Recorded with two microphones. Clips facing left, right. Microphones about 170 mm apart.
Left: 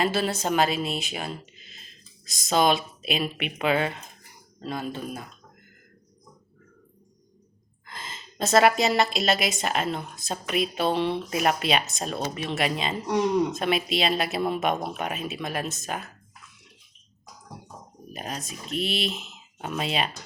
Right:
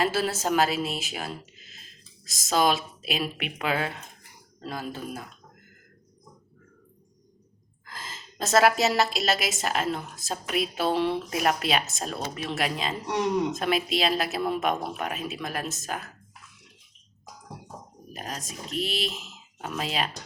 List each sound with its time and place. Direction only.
0.0 s a woman's voice: 5° right (ahead or behind)
7.9 s a woman's voice: centre (ahead or behind)
18.1 s a woman's voice: centre (ahead or behind)